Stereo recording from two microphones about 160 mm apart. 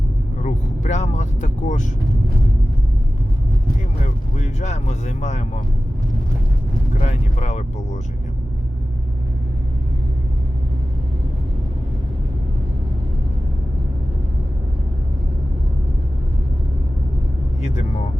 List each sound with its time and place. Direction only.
0.4 s vehicle: 50° left (ahead or behind)
4.4 s speech: 45° left (ahead or behind)
7.0 s speech: 45° left (ahead or behind)